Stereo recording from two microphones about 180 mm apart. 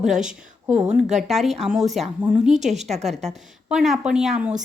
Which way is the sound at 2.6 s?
40° right (ahead or behind).